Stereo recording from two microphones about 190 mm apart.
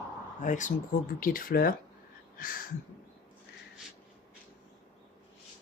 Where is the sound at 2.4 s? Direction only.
45° left (ahead or behind).